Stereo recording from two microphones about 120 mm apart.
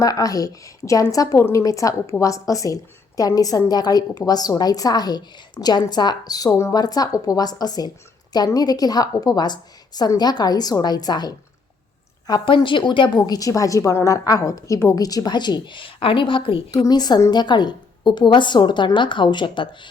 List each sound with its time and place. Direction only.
0.0 s a woman's voice: 30° left (ahead or behind); by 16.6 s 45° left (ahead or behind)
16.7 s a woman's voice: 35° left (ahead or behind)